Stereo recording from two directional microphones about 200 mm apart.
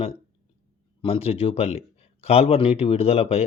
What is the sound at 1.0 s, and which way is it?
Speech, 30° left (ahead or behind).